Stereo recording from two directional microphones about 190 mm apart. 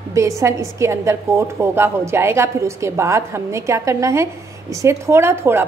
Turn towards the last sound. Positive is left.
turn(degrees=-15)  # may be behind; listen again after turning